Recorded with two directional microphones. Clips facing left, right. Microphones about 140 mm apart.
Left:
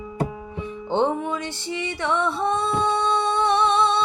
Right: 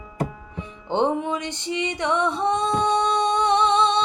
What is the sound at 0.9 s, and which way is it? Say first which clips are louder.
Music: even; 15° right (ahead or behind).